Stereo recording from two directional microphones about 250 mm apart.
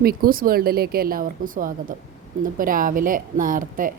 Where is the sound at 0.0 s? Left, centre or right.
Right.